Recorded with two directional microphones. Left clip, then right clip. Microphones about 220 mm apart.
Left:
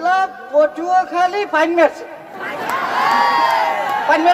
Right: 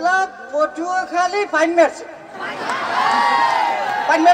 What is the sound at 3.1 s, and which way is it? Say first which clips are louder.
Crowd: left 2 dB; 50° right (ahead or behind).